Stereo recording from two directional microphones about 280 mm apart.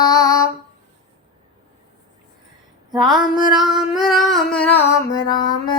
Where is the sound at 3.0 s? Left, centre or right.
Centre.